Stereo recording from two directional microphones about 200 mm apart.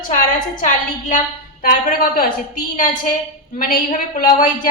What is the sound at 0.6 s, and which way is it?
A woman's voice, 40° left (ahead or behind).